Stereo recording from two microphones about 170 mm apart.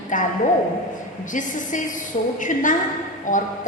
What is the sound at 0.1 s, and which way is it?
Speech, 50° left (ahead or behind).